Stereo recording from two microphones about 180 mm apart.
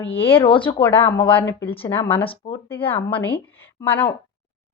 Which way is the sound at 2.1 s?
30° left (ahead or behind).